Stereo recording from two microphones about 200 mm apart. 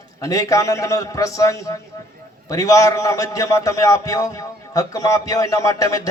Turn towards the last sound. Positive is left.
turn(degrees=15)  # may be behind; listen again after turning